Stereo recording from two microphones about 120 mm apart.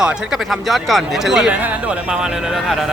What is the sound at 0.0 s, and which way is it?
Speech, centre (ahead or behind).